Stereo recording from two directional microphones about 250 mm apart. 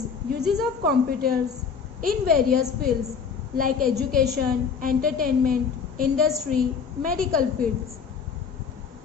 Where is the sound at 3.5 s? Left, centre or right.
Right.